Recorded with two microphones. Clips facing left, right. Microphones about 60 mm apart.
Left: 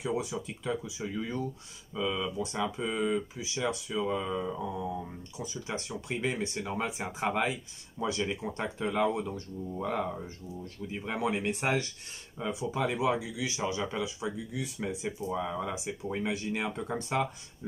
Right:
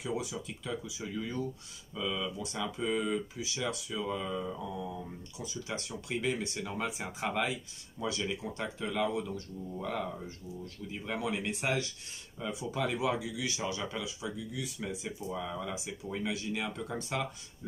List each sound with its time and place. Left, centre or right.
0.0 s speech: left
2.8 s speech: centre